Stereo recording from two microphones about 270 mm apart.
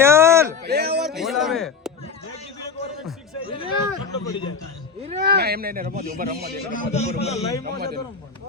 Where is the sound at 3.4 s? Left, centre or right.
Centre.